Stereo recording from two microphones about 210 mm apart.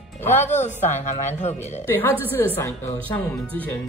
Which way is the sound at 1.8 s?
10° left (ahead or behind).